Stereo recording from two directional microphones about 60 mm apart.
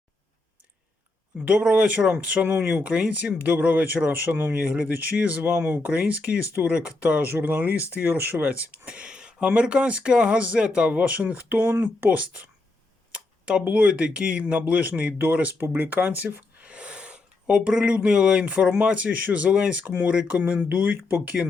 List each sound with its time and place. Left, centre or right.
1.5 s speech: centre; by 4.5 s right
4.5 s speech: centre
13.1 s a sound: centre
13.7 s speech: right
19.8 s speech: right